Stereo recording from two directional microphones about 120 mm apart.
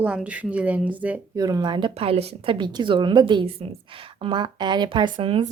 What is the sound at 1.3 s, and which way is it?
A woman's voice, 30° right (ahead or behind).